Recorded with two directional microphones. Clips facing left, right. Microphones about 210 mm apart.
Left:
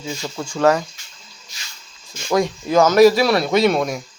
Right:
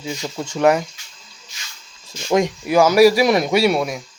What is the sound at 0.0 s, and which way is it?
Speech, 15° right (ahead or behind).